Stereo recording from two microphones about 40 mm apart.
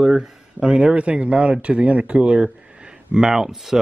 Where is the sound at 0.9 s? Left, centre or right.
Right; by 3.8 s centre.